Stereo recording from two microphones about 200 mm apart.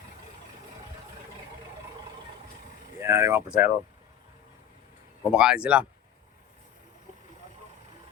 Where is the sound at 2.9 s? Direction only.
15° right (ahead or behind).